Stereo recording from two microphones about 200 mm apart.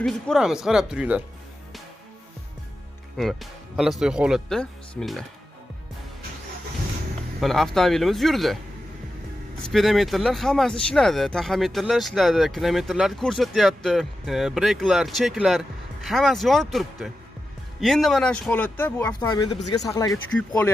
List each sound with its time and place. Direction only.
0.0 s speech: centre (ahead or behind)
3.2 s speech: centre (ahead or behind)
7.3 s speech: centre (ahead or behind)
9.6 s speech: centre (ahead or behind)
19.1 s speech: 20° left (ahead or behind)
20.1 s speech: 5° left (ahead or behind)